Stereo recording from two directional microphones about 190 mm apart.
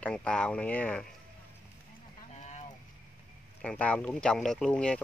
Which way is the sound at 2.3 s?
35° left (ahead or behind).